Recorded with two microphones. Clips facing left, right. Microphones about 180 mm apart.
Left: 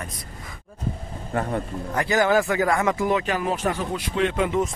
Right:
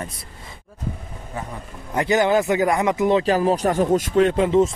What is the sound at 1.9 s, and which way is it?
Speech, 20° right (ahead or behind).